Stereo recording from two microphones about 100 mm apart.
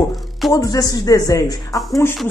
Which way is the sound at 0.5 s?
35° left (ahead or behind).